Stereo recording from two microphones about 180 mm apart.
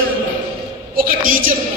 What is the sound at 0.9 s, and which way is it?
Speech, 50° right (ahead or behind).